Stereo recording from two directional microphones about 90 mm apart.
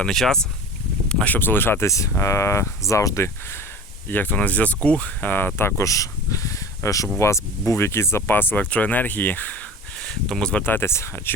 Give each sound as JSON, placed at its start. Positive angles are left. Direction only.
{"t": 0.0, "sound": "speech", "side_deg": 5}
{"t": 1.9, "sound": "speech", "side_deg": 35}
{"t": 4.1, "sound": "speech", "side_deg": 20}
{"t": 10.0, "sound": "speech", "side_deg": 5}
{"t": 10.6, "sound": "speech", "side_deg": 25}